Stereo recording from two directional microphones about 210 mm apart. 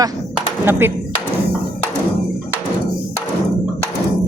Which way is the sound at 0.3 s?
10° right (ahead or behind).